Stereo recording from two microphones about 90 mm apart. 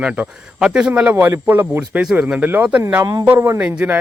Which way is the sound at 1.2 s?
20° right (ahead or behind).